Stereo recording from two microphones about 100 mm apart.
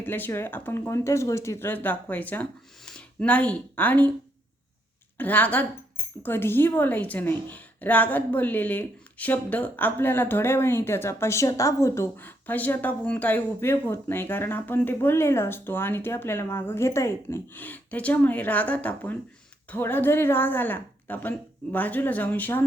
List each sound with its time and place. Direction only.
0.0 s speech: 20° left (ahead or behind)
5.1 s a woman's voice: 15° left (ahead or behind)